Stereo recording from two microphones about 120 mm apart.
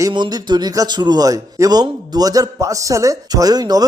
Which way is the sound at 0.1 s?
35° right (ahead or behind).